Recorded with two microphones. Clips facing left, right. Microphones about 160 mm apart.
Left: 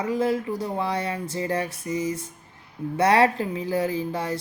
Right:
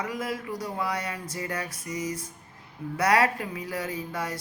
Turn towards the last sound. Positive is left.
turn(degrees=30)  # may be behind; listen again after turning